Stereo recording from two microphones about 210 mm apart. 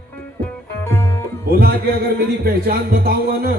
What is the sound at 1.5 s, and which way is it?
A man's voice, 45° right (ahead or behind).